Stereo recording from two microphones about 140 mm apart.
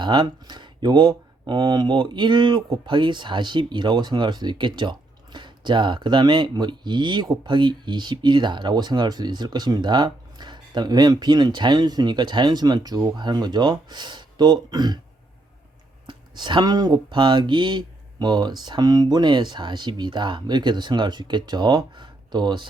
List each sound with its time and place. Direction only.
0.0 s speech: 30° right (ahead or behind)
16.0 s speech: 30° right (ahead or behind)